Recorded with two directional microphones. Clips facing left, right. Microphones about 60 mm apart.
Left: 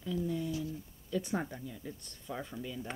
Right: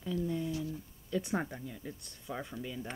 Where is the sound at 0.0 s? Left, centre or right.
Centre.